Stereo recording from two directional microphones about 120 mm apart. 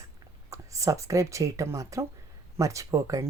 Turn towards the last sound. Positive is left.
turn(degrees=-25)  # may be behind; listen again after turning